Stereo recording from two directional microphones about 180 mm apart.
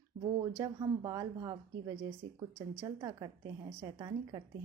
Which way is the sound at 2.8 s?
20° right (ahead or behind).